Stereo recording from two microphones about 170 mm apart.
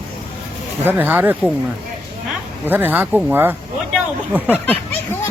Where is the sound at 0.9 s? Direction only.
10° right (ahead or behind).